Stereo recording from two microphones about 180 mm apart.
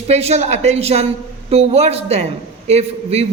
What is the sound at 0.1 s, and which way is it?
A man's voice, 35° right (ahead or behind).